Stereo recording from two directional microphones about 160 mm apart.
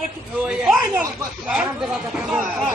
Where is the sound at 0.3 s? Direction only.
5° right (ahead or behind).